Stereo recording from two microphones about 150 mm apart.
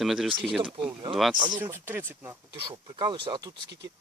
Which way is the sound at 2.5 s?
30° right (ahead or behind).